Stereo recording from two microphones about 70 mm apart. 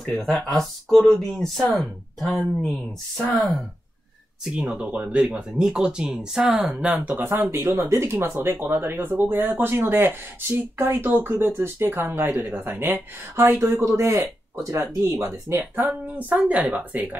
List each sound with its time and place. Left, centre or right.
0.0 s speech: centre
4.5 s speech: centre
7.2 s speech: right
15.5 s speech: right